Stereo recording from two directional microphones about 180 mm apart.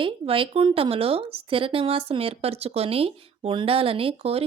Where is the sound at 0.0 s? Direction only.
30° right (ahead or behind).